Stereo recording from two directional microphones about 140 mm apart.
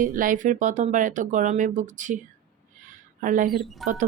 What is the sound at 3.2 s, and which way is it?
Speech, 70° right (ahead or behind).